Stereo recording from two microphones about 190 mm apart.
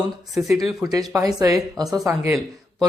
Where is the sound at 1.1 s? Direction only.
20° right (ahead or behind).